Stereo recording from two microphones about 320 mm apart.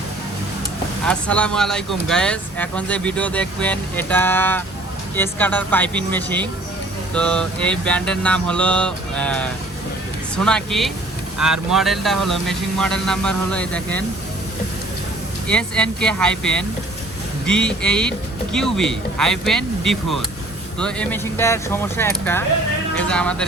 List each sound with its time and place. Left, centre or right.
1.0 s speech: centre
15.4 s speech: centre